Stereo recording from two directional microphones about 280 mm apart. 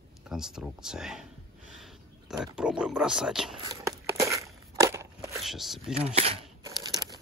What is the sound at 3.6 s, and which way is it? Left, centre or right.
Walk, centre.